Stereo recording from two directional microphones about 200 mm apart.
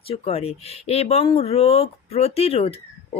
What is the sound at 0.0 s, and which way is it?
Speech, 30° left (ahead or behind).